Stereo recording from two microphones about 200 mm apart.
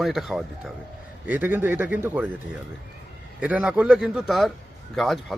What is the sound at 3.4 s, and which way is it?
Speech, 5° right (ahead or behind).